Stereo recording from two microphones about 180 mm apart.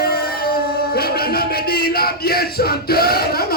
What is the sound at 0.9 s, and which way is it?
Music, 60° left (ahead or behind).